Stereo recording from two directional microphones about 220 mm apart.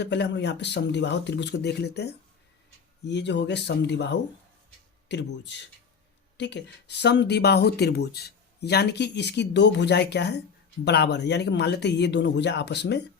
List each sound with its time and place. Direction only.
0.0 s speech: 50° left (ahead or behind)